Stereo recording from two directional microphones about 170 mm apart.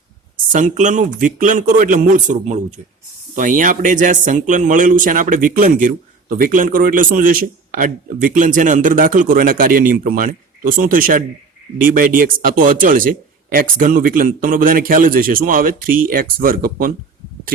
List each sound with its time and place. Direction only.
0.5 s a man's voice: 50° right (ahead or behind)